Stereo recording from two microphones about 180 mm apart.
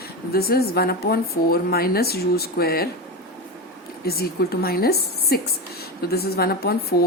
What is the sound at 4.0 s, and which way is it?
A woman's voice, 60° left (ahead or behind).